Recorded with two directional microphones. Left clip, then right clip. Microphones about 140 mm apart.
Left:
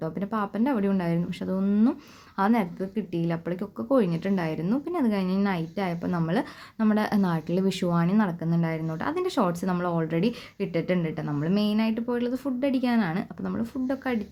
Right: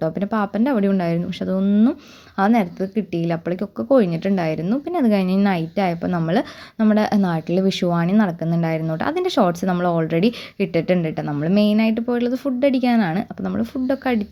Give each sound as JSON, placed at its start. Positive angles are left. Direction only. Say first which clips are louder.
{"t": 0.0, "sound": "a woman's voice", "louder": "right 8 dB", "side_deg": -35}